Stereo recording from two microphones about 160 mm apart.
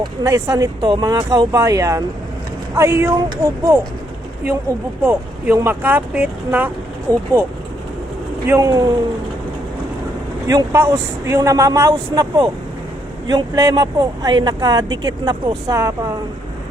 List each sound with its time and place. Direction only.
0.0 s speech: 20° right (ahead or behind)
5.0 s speech: 15° right (ahead or behind)
7.1 s speech: 20° right (ahead or behind)
8.4 s speech: 20° right (ahead or behind)
10.4 s speech: 20° right (ahead or behind)